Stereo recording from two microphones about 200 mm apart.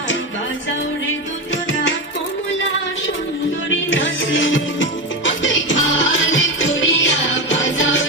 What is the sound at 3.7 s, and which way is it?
Music, 70° left (ahead or behind).